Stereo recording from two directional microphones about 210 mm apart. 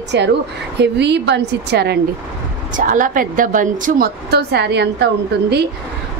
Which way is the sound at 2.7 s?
40° right (ahead or behind).